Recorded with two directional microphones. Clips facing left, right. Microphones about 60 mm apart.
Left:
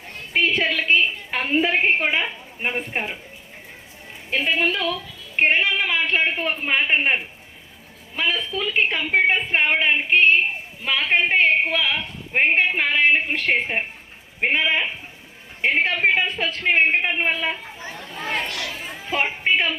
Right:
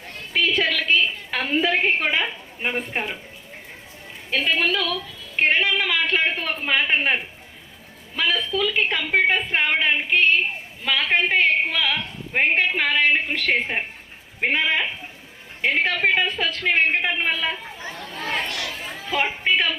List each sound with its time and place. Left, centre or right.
0.3 s a woman's voice: left
4.3 s a woman's voice: left
13.6 s a man's voice: centre
18.5 s a sound: left